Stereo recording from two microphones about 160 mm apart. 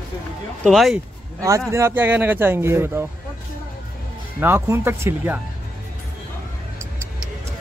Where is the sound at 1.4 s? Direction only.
20° right (ahead or behind).